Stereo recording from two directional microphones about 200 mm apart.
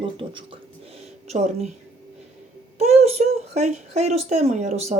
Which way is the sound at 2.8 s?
35° right (ahead or behind).